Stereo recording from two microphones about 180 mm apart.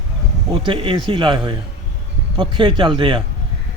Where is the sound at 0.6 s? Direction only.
30° right (ahead or behind).